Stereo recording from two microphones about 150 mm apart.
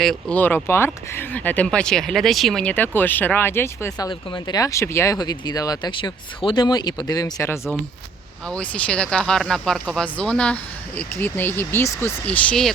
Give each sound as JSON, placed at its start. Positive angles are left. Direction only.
{"t": 0.0, "sound": "speech", "side_deg": 5}